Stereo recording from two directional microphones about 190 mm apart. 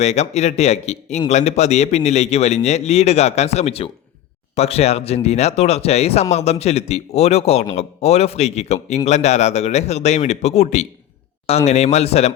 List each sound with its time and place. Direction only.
0.0 s a man's voice: 35° left (ahead or behind)